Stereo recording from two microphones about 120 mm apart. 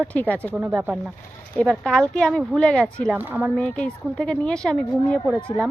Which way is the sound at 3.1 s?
15° right (ahead or behind).